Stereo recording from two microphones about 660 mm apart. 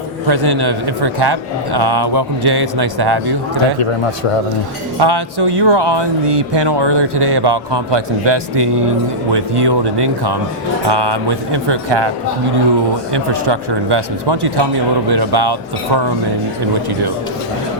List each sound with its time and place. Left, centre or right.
0.3 s speech: right
3.8 s a man's voice: left
4.9 s speech: right
13.1 s speech: right